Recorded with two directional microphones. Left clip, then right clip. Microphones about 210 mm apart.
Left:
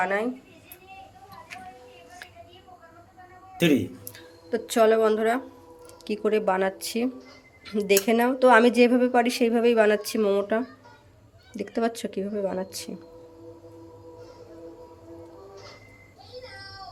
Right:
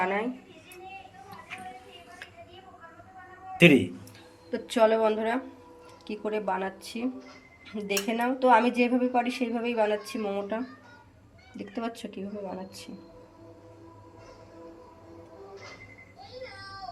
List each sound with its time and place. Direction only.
0.0 s speech: 25° left (ahead or behind)
3.6 s speech: 10° right (ahead or behind)
4.5 s speech: 25° left (ahead or behind)
6.1 s speech: 45° left (ahead or behind)